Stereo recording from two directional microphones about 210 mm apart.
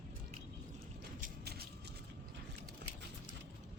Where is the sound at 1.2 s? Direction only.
50° right (ahead or behind).